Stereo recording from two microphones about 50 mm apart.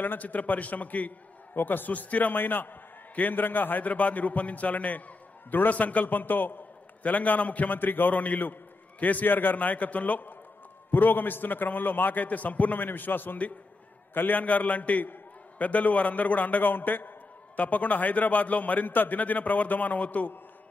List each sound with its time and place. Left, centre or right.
0.0 s a man's voice: left
14.4 s a man's voice: left